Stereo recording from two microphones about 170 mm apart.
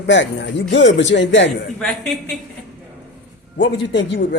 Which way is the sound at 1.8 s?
5° left (ahead or behind).